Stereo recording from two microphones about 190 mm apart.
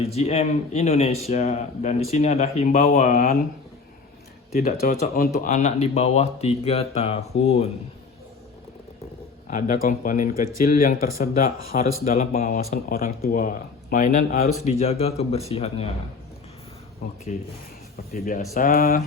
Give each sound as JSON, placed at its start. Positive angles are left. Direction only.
{"t": 0.0, "sound": "speech", "side_deg": 35}
{"t": 4.6, "sound": "speech", "side_deg": 45}
{"t": 9.5, "sound": "speech", "side_deg": 45}
{"t": 14.7, "sound": "speech", "side_deg": 30}
{"t": 17.3, "sound": "speech", "side_deg": 40}